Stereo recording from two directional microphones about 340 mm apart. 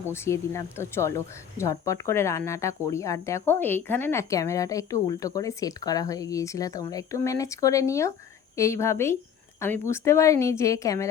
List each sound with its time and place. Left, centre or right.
0.1 s speech: centre